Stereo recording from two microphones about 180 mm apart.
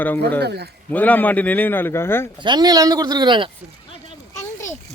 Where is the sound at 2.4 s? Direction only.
25° right (ahead or behind).